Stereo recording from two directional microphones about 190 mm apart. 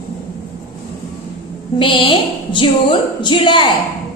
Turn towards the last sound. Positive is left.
turn(degrees=25)  # may be behind; listen again after turning